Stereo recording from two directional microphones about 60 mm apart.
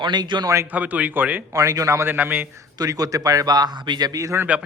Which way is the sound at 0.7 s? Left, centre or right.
Right.